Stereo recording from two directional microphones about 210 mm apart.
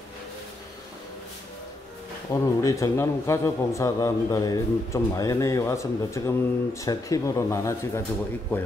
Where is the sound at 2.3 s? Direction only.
15° left (ahead or behind).